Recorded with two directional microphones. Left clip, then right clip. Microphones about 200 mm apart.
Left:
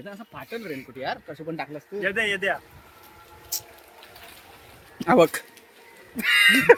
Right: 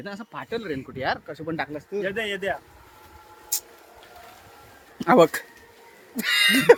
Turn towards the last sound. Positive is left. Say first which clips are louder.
# left 1 dB
turn(degrees=-35)  # may be behind; listen again after turning